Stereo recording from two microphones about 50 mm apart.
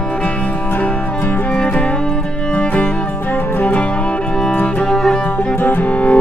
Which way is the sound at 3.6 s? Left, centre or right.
Left.